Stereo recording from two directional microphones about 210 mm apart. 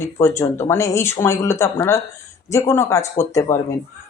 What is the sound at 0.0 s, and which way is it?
Speech, 10° left (ahead or behind).